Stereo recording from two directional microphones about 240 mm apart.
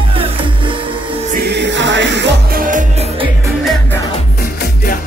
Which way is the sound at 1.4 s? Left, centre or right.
Right.